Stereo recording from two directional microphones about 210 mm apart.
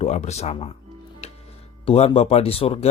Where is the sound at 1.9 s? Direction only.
30° left (ahead or behind).